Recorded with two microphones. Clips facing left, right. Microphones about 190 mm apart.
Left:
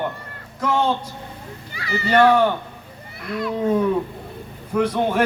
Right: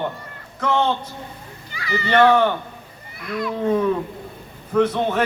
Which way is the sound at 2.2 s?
10° left (ahead or behind).